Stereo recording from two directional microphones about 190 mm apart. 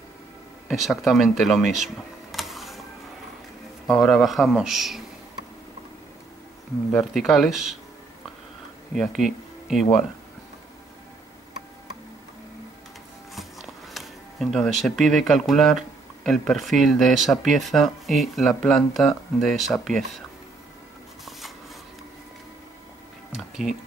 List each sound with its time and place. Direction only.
0.7 s speech: centre (ahead or behind)
2.3 s printer: centre (ahead or behind)
3.8 s speech: centre (ahead or behind)
6.9 s speech: 5° left (ahead or behind)
8.9 s speech: centre (ahead or behind)
13.3 s a sound: centre (ahead or behind)
16.3 s speech: centre (ahead or behind)